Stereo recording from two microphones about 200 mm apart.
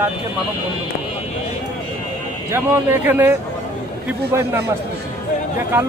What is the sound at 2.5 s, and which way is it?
A man's voice, 10° right (ahead or behind).